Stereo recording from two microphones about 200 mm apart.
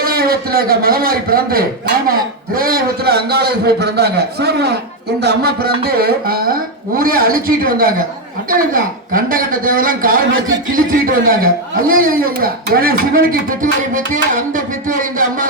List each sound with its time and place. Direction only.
0.0 s speech: 50° right (ahead or behind)